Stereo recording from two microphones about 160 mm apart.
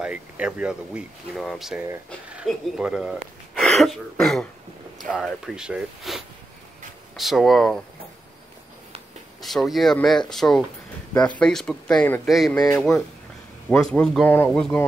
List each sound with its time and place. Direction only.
0.0 s speech: 5° right (ahead or behind)
9.4 s speech: centre (ahead or behind)
12.5 s speech: 20° left (ahead or behind)
13.7 s speech: 5° left (ahead or behind)